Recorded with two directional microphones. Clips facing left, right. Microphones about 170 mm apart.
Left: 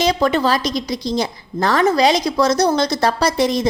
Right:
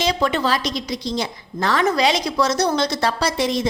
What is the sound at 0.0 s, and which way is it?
A woman's voice, 40° left (ahead or behind).